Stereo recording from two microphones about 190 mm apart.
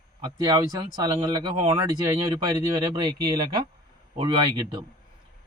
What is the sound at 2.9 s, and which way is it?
A man's voice, 20° right (ahead or behind).